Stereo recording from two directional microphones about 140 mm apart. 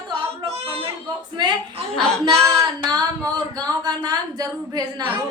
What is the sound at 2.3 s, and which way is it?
Speech, 20° right (ahead or behind).